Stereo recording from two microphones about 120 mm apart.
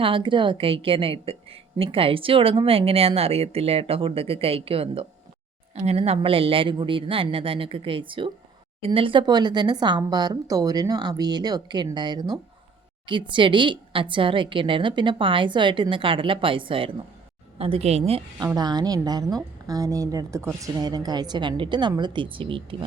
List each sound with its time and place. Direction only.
0.0 s a woman's voice: 45° right (ahead or behind)
17.6 s a woman's voice: 55° right (ahead or behind)
18.3 s a woman's voice: 35° right (ahead or behind)